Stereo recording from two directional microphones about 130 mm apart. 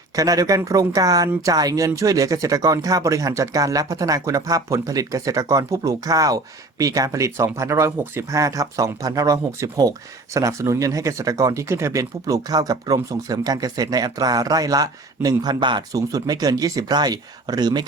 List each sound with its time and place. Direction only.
0.2 s speech: 30° right (ahead or behind)